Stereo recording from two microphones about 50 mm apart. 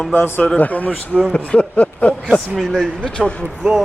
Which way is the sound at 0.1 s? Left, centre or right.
Left.